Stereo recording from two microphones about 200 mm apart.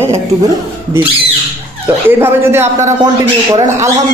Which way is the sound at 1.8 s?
10° right (ahead or behind).